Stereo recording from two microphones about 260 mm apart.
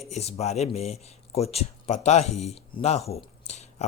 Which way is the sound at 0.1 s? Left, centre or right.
Left.